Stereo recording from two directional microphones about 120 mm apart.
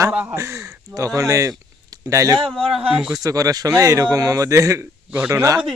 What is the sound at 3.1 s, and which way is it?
A man's voice, 30° right (ahead or behind).